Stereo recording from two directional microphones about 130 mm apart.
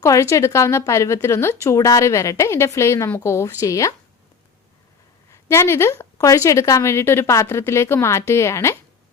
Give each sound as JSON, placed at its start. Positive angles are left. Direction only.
{"t": 0.0, "sound": "a woman's voice", "side_deg": 25}
{"t": 5.3, "sound": "a woman's voice", "side_deg": 20}